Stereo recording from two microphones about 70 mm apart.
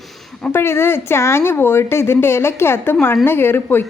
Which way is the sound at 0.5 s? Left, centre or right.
Left.